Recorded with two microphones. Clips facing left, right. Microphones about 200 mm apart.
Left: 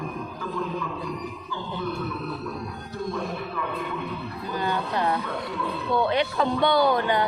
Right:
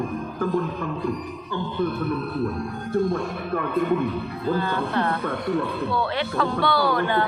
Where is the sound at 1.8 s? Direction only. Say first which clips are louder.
Right 7 dB; 55° right (ahead or behind).